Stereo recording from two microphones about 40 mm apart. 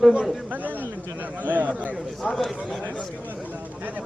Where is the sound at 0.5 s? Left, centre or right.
Right.